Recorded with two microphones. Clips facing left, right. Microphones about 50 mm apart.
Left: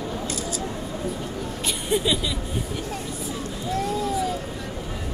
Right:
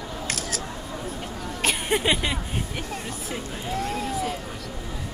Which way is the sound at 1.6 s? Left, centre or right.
Right.